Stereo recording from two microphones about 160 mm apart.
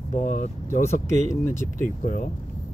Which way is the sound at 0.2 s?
55° left (ahead or behind).